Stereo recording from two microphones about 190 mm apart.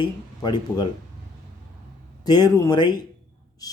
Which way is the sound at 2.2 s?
20° left (ahead or behind).